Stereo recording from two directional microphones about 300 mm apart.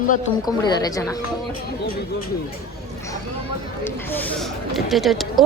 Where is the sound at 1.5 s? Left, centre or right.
Left.